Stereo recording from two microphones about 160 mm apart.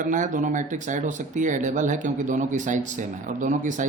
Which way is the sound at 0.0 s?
55° right (ahead or behind).